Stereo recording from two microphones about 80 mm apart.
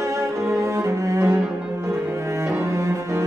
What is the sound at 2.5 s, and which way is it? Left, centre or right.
Cello, right.